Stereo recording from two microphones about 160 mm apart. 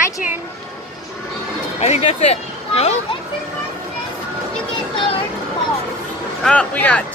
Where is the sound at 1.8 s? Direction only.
40° left (ahead or behind).